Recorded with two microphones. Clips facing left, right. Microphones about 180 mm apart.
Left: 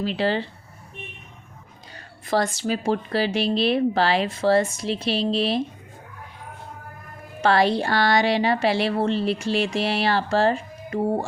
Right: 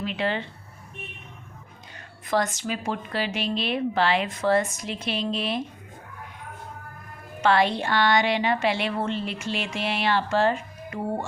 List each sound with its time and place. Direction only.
0.0 s speech: 35° left (ahead or behind)
2.2 s speech: 30° left (ahead or behind)
7.4 s speech: 35° left (ahead or behind)